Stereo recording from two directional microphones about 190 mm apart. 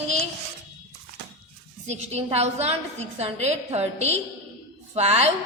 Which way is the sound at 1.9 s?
35° right (ahead or behind).